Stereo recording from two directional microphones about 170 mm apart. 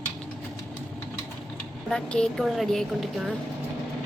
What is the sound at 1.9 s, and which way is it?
A woman's voice, 5° left (ahead or behind).